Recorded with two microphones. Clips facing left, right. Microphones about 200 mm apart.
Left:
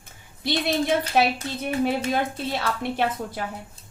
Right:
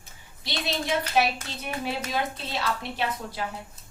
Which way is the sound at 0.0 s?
55° left (ahead or behind).